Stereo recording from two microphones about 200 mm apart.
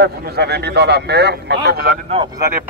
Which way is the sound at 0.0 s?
55° right (ahead or behind).